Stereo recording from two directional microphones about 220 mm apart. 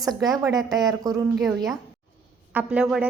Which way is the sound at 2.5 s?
5° right (ahead or behind).